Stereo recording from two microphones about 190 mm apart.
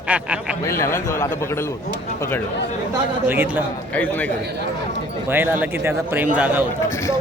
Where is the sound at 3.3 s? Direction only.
10° right (ahead or behind).